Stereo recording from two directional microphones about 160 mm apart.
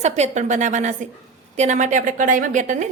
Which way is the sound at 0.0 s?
45° right (ahead or behind).